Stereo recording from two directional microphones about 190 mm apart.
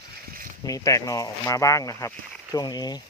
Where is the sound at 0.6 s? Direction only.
15° left (ahead or behind).